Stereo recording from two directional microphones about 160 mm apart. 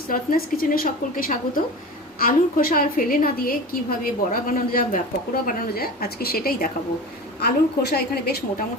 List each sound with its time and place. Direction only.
0.1 s a woman's voice: 65° left (ahead or behind)
7.3 s a woman's voice: 90° left